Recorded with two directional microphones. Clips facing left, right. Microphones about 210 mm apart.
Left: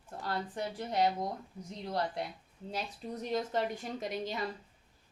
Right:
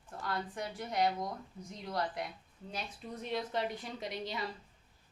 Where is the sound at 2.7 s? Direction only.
40° left (ahead or behind).